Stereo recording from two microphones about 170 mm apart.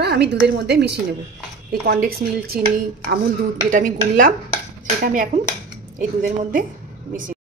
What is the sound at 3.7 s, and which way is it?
A woman's voice, 50° right (ahead or behind).